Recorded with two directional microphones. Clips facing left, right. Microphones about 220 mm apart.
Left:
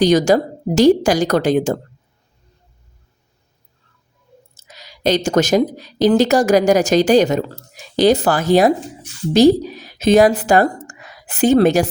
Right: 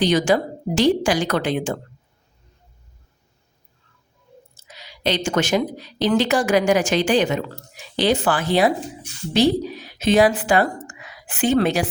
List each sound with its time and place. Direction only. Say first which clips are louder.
0.0 s a woman's voice: left 5 dB; 40° left (ahead or behind)
4.5 s a woman's voice: left 1 dB; 45° left (ahead or behind)